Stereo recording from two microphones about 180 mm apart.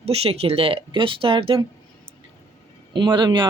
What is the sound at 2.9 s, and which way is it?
Speech, 25° right (ahead or behind).